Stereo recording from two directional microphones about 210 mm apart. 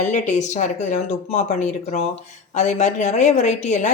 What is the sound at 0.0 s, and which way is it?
A woman's voice, 35° left (ahead or behind).